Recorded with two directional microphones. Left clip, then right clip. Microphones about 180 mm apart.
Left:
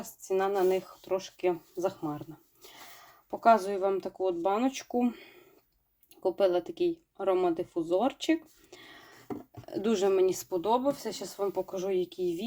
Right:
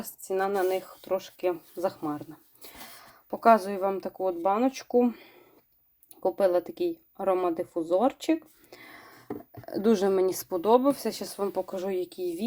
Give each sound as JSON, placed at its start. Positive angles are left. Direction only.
{"t": 0.0, "sound": "speech", "side_deg": -40}